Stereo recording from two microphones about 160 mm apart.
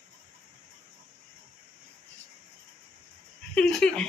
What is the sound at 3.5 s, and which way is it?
Dog, 5° left (ahead or behind).